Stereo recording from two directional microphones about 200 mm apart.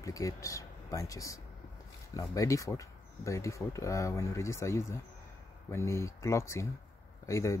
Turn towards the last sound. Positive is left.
turn(degrees=15)  # may be behind; listen again after turning